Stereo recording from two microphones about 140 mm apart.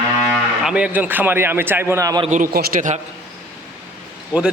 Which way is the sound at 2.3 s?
80° right.